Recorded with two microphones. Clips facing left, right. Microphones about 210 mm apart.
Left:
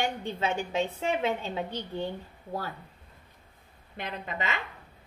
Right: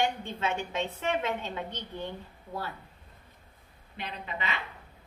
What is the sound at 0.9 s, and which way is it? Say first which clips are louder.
Speech: left 2 dB; 30° left (ahead or behind).